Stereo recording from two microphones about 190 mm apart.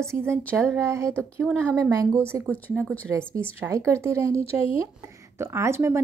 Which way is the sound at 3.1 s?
15° right (ahead or behind).